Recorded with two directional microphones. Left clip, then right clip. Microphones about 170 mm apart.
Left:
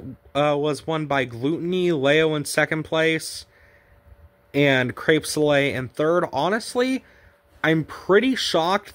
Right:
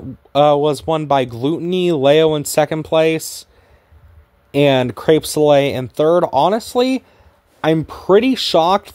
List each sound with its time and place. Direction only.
0.3 s speech: 30° right (ahead or behind)
4.5 s speech: 30° right (ahead or behind)